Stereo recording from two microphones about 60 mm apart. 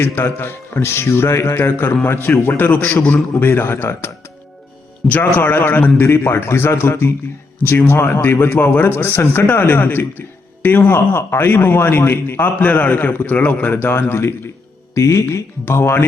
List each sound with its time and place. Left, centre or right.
0.0 s a man's voice: left
2.6 s a man's voice: left
5.0 s a man's voice: left
10.8 s a man's voice: left
14.9 s speech: left
15.6 s a man's voice: left